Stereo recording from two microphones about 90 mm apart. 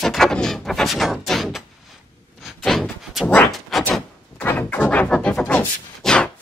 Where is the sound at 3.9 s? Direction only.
20° left (ahead or behind).